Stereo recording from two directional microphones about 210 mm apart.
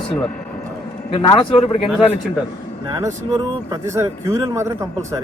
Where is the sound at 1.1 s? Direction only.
25° left (ahead or behind).